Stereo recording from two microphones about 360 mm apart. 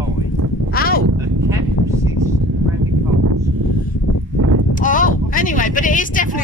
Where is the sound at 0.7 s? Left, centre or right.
Left.